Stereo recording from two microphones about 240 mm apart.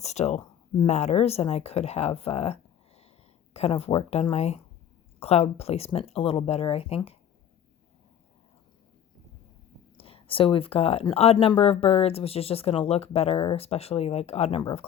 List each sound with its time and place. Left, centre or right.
0.0 s speech: left
10.0 s speech: left